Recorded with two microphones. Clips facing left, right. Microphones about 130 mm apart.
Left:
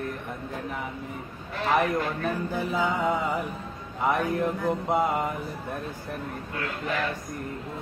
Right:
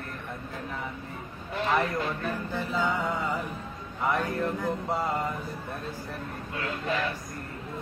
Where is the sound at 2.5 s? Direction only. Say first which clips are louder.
Even; 15° left (ahead or behind).